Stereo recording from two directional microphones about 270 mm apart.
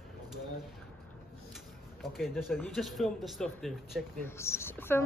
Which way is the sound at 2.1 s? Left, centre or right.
Centre.